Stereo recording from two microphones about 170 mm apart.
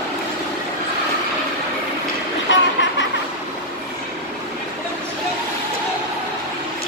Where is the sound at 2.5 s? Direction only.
90° left.